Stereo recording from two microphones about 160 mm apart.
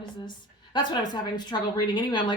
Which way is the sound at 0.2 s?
30° left (ahead or behind).